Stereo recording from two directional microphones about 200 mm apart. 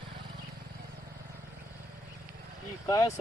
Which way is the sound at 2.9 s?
15° left (ahead or behind).